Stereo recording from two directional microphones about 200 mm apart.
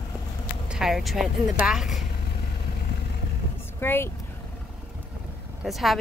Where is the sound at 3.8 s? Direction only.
10° left (ahead or behind).